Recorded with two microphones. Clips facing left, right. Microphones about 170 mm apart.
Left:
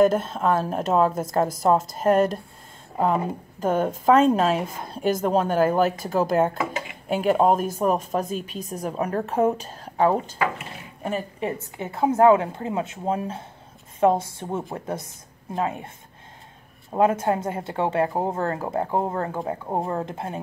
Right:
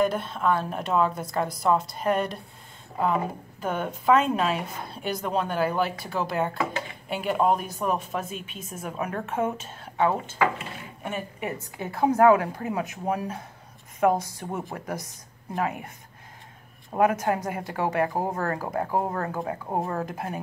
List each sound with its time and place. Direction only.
0.0 s a woman's voice: 45° left (ahead or behind); by 15.9 s 25° left (ahead or behind)
16.9 s a woman's voice: 25° left (ahead or behind)